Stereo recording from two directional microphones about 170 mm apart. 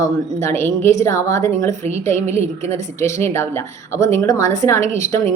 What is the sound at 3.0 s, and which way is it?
A woman's voice, 15° left (ahead or behind).